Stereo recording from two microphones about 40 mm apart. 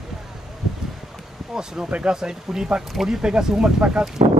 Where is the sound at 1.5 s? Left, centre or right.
Centre.